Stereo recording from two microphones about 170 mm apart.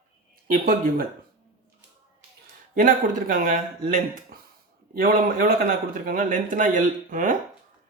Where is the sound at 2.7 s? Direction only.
55° right (ahead or behind).